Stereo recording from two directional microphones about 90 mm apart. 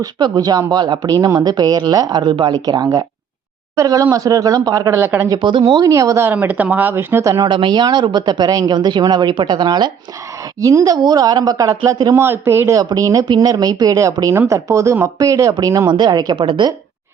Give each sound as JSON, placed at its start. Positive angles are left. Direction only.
{"t": 0.0, "sound": "speech", "side_deg": -45}
{"t": 4.9, "sound": "speech", "side_deg": -25}
{"t": 5.3, "sound": "speech", "side_deg": -65}
{"t": 5.6, "sound": "speech", "side_deg": -40}
{"t": 6.2, "sound": "speech", "side_deg": -20}
{"t": 7.4, "sound": "speech", "side_deg": -60}
{"t": 10.6, "sound": "speech", "side_deg": -40}
{"t": 12.1, "sound": "speech", "side_deg": -30}
{"t": 12.8, "sound": "speech", "side_deg": -45}
{"t": 15.9, "sound": "speech", "side_deg": -50}
{"t": 16.3, "sound": "a woman's voice", "side_deg": -65}